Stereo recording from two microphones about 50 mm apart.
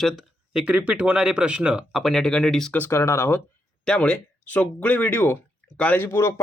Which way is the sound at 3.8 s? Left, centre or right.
Left.